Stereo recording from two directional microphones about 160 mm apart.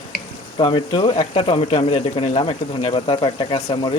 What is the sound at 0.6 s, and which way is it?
Speech, 30° left (ahead or behind).